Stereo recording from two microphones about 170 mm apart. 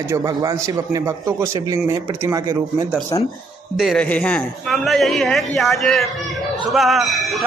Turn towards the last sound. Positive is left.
turn(degrees=0)  # may be behind; listen again after turning